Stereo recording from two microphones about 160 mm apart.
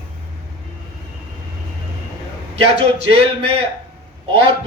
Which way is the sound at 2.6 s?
40° right (ahead or behind).